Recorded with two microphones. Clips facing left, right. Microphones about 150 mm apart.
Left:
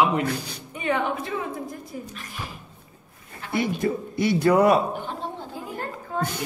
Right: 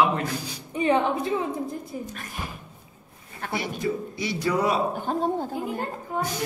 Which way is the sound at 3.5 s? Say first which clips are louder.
Left 4 dB; 55° left (ahead or behind).